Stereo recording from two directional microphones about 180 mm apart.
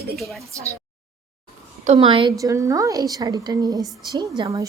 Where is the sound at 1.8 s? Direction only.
35° right (ahead or behind).